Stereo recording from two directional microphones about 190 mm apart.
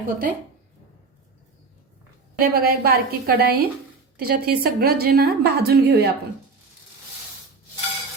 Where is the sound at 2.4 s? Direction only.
55° right (ahead or behind).